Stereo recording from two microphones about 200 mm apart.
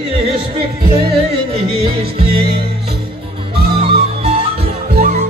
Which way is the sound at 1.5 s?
30° right (ahead or behind).